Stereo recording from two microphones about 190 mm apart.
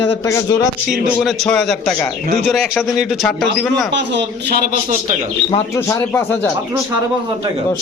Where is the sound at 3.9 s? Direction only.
65° right (ahead or behind).